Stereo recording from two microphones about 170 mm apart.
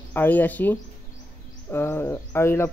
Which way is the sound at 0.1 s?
10° left (ahead or behind).